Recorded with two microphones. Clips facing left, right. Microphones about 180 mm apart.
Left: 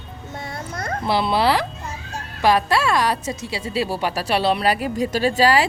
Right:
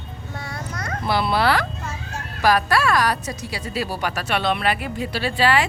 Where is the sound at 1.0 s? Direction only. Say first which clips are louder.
Left 1 dB; 25° left (ahead or behind).